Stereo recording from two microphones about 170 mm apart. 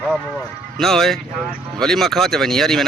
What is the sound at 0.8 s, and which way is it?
Speech, centre (ahead or behind).